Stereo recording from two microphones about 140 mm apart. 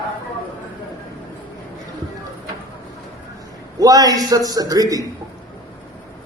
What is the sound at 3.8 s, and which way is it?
A man's voice, 25° right (ahead or behind).